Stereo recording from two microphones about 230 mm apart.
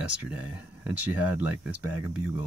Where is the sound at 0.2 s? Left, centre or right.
Centre.